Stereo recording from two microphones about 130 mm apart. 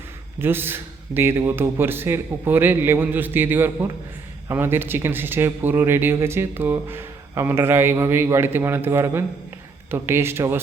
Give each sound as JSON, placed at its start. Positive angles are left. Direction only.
{"t": 0.3, "sound": "speech", "side_deg": -15}